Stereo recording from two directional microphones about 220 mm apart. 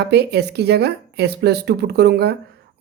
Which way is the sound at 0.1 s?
50° right (ahead or behind).